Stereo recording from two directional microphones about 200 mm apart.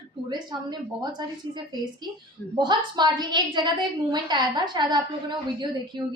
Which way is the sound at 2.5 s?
20° right (ahead or behind).